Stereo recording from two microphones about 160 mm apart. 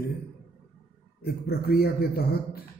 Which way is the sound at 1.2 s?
75° left (ahead or behind).